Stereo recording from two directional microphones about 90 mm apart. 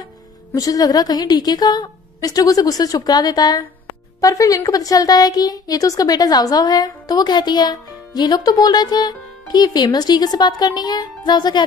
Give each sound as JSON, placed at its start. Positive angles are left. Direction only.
{"t": 0.6, "sound": "a woman's voice", "side_deg": 40}